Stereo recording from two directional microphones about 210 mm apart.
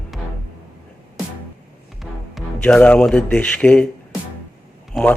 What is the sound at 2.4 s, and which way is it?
A man's voice, 5° left (ahead or behind).